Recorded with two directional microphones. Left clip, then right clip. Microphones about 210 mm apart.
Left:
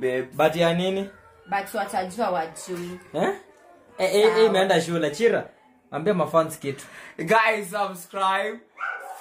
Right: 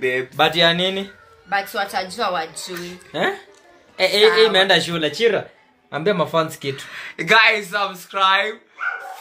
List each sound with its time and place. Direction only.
0.4 s speech: 10° right (ahead or behind)
1.5 s speech: 5° left (ahead or behind)
4.9 s speech: 25° right (ahead or behind)
6.9 s speech: 15° left (ahead or behind)